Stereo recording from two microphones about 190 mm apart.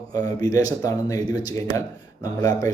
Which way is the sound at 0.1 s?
20° left (ahead or behind).